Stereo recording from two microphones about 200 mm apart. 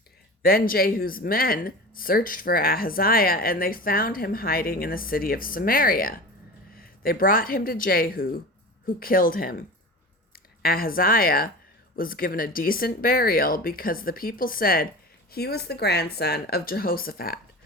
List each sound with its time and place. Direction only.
0.4 s speech: 45° left (ahead or behind)